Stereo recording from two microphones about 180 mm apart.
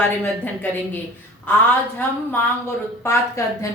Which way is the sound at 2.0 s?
10° left (ahead or behind).